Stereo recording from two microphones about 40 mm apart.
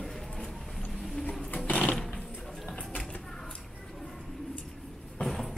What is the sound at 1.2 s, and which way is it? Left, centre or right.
Sewing machine, left.